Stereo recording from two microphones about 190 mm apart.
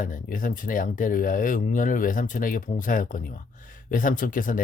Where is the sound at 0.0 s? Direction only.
45° left (ahead or behind).